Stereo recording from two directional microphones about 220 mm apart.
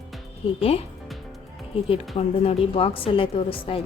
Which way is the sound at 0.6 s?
25° left (ahead or behind).